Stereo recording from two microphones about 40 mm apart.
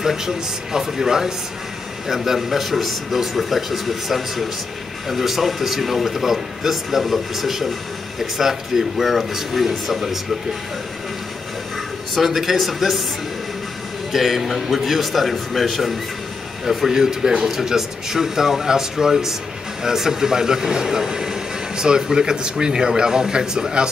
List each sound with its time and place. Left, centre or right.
0.0 s speech: centre
12.1 s speech: centre
14.1 s speech: centre